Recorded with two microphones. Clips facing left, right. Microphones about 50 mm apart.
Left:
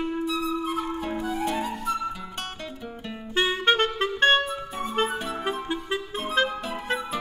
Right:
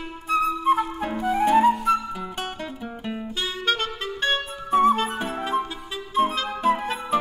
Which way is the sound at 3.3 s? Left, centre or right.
Left.